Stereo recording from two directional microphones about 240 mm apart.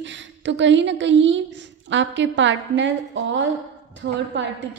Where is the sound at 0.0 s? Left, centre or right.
Right.